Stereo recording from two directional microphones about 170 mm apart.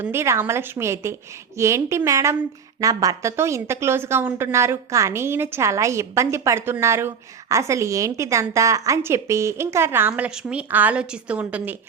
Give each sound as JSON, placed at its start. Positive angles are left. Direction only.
{"t": 0.0, "sound": "a woman's voice", "side_deg": -15}